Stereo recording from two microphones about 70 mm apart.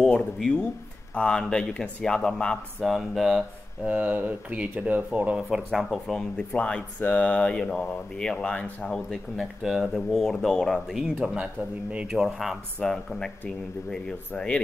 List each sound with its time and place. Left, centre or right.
0.0 s speech: centre
2.8 s speech: centre
3.8 s speech: right
5.5 s speech: centre
6.1 s speech: centre
9.6 s speech: centre
10.1 s speech: centre
10.9 s speech: centre
12.2 s speech: centre
12.8 s speech: centre